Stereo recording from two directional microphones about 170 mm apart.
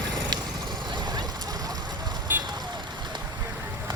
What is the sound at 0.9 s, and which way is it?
Vehicle, 25° right (ahead or behind).